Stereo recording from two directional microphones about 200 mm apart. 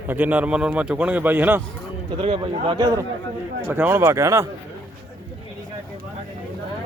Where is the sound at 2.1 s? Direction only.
25° right (ahead or behind).